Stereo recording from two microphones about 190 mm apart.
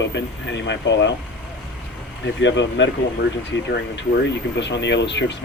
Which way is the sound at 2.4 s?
75° left (ahead or behind).